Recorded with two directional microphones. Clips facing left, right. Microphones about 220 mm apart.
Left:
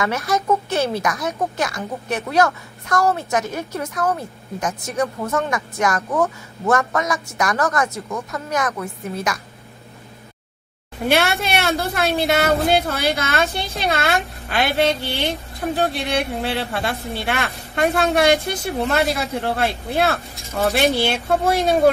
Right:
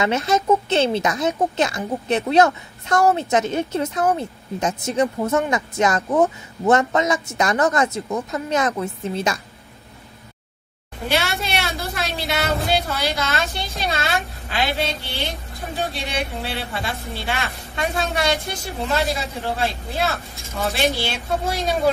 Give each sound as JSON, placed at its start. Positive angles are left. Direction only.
{"t": 0.0, "sound": "speech", "side_deg": -25}
{"t": 11.1, "sound": "a woman's voice", "side_deg": 55}
{"t": 20.5, "sound": "speech", "side_deg": 50}